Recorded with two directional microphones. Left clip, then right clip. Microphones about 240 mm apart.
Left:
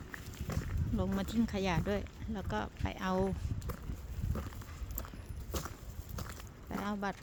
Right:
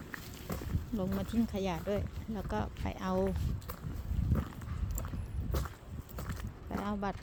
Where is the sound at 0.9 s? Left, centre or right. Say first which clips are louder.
Even; centre.